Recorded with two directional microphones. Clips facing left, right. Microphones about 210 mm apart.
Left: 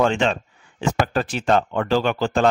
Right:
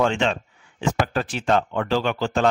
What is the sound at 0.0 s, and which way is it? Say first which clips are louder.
Speech: left 2 dB; 40° left (ahead or behind).